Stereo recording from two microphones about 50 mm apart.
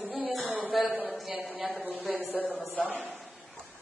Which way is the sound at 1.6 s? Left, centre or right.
Centre.